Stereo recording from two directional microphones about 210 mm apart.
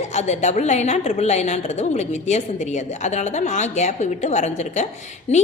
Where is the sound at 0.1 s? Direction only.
30° left (ahead or behind).